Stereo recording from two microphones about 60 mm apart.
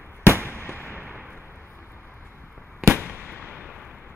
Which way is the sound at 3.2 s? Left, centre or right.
Left.